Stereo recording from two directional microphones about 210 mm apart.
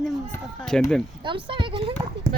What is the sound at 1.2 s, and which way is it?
Speech, 25° right (ahead or behind).